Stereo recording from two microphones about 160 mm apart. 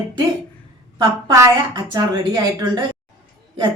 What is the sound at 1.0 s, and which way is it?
Speech, 25° right (ahead or behind).